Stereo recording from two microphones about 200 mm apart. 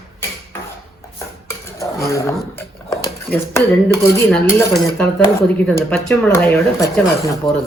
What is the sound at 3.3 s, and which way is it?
Speech, 15° left (ahead or behind).